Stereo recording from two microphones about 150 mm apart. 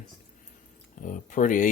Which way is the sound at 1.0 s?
60° left (ahead or behind).